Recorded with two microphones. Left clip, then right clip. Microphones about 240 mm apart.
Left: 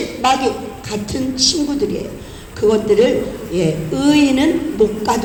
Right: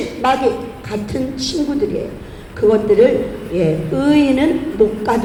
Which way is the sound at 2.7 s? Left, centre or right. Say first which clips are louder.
Right 2 dB; left.